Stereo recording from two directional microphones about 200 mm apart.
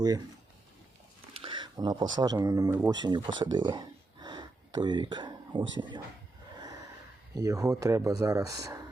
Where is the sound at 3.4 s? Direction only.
20° right (ahead or behind).